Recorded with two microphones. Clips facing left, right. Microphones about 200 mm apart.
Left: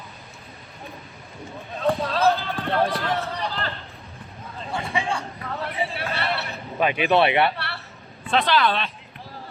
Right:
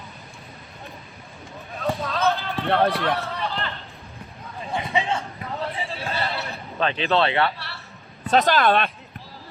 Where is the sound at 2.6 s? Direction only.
65° right (ahead or behind).